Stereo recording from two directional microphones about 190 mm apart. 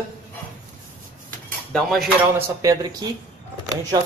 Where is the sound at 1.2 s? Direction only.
5° left (ahead or behind).